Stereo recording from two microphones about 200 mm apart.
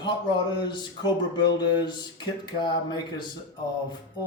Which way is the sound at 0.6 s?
25° left (ahead or behind).